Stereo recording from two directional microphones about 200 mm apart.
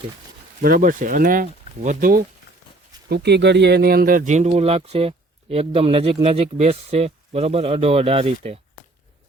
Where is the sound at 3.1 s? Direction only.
55° right (ahead or behind); by 8.6 s 30° right (ahead or behind).